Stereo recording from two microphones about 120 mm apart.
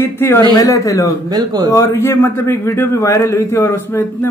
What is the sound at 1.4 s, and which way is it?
Speech, 30° right (ahead or behind).